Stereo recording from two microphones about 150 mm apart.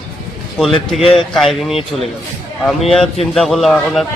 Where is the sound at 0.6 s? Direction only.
Centre (ahead or behind).